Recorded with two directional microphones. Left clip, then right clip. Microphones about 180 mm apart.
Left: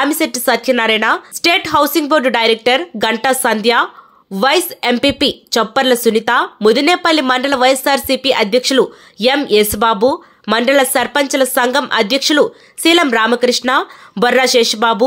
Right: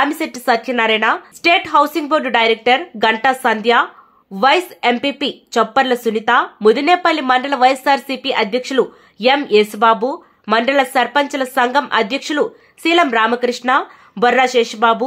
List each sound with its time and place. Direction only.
0.0 s speech: 20° left (ahead or behind)